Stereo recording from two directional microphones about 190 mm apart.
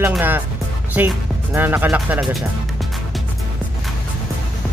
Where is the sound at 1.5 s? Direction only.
10° right (ahead or behind).